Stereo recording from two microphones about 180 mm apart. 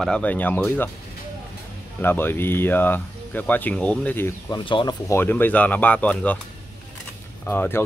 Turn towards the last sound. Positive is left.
turn(degrees=10)  # may be behind; listen again after turning